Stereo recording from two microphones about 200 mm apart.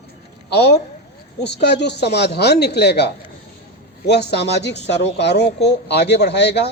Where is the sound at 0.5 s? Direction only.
55° left (ahead or behind).